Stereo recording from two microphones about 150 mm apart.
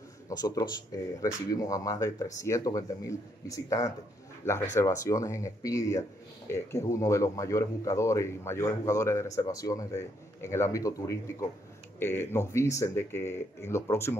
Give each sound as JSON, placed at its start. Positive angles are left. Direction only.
{"t": 0.3, "sound": "speech", "side_deg": 25}